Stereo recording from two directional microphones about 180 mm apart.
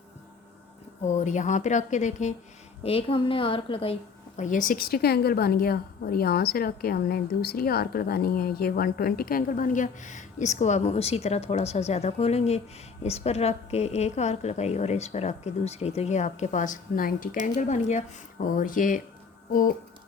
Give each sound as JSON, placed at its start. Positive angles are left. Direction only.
{"t": 1.0, "sound": "a woman's voice", "side_deg": 40}
{"t": 2.8, "sound": "a woman's voice", "side_deg": 30}
{"t": 4.4, "sound": "a woman's voice", "side_deg": 45}